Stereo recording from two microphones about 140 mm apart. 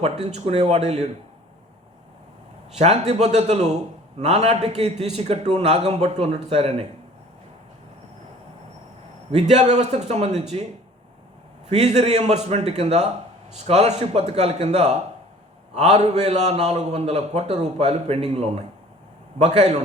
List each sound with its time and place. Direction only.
0.0 s a man's voice: 50° right (ahead or behind)
2.7 s a man's voice: 50° right (ahead or behind)
9.3 s a man's voice: 50° right (ahead or behind)
11.7 s a man's voice: 50° right (ahead or behind)